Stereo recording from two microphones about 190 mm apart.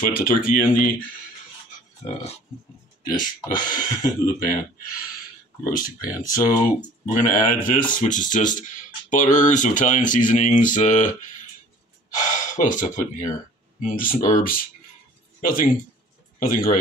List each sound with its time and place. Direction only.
0.0 s speech: 50° left (ahead or behind)
3.2 s speech: 20° left (ahead or behind)
3.7 s speech: 45° left (ahead or behind)
6.1 s speech: 15° left (ahead or behind)
7.2 s speech: 45° left (ahead or behind)
12.3 s a man's voice: 40° left (ahead or behind)